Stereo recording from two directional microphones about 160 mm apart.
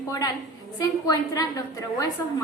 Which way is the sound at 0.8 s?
20° left (ahead or behind).